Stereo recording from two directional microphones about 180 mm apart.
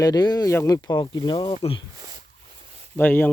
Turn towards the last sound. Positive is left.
turn(degrees=10)  # may be behind; listen again after turning